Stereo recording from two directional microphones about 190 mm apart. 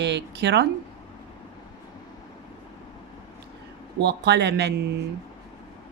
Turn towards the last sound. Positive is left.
turn(degrees=-60)  # may be behind; listen again after turning